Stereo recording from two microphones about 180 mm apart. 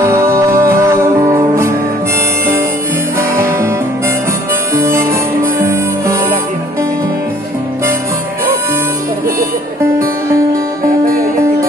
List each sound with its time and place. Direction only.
0.0 s music: 15° right (ahead or behind)
3.2 s guitar: 15° right (ahead or behind)
4.7 s music: 15° right (ahead or behind)